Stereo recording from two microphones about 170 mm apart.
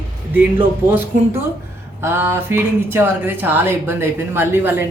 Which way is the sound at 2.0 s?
15° right (ahead or behind).